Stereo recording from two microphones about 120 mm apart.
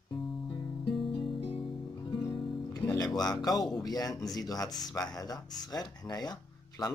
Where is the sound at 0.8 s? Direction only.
45° left (ahead or behind).